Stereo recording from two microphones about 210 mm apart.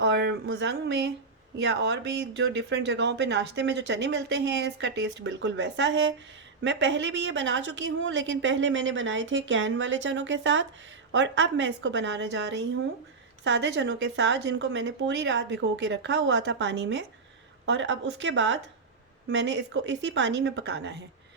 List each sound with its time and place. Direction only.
0.0 s speech: 55° right (ahead or behind)